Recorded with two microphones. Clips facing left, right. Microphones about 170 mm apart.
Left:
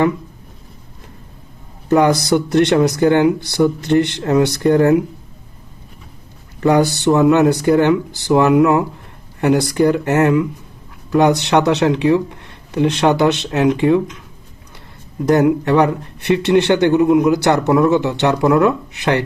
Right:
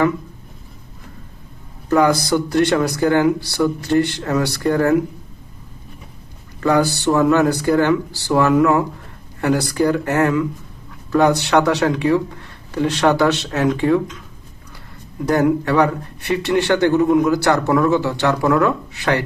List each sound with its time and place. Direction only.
1.9 s speech: 20° left (ahead or behind)
6.6 s speech: 20° left (ahead or behind)
15.3 s speech: 20° left (ahead or behind)